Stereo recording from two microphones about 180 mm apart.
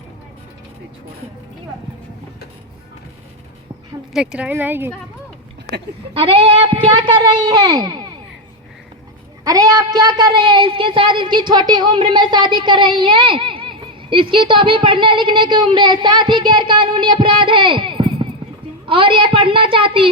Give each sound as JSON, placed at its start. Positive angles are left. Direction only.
{"t": 4.1, "sound": "speech", "side_deg": -5}
{"t": 6.1, "sound": "a woman's voice", "side_deg": -30}
{"t": 9.4, "sound": "a woman's voice", "side_deg": -20}